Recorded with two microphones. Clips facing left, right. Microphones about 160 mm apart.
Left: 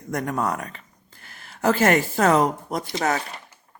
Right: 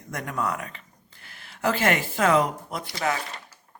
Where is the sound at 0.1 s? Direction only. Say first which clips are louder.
Left 4 dB; 45° left (ahead or behind).